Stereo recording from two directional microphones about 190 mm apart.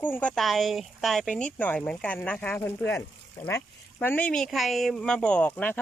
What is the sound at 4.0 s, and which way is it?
Speech, 10° left (ahead or behind).